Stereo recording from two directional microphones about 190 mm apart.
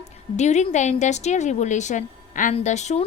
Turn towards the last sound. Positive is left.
turn(degrees=35)  # may be behind; listen again after turning